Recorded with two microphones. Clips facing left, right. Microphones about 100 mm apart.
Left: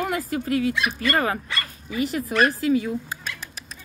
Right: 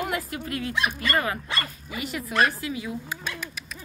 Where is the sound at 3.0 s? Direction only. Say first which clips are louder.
Right 1 dB; 35° left (ahead or behind).